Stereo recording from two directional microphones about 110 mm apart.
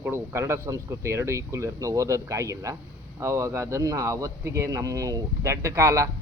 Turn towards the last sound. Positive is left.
turn(degrees=-30)  # may be behind; listen again after turning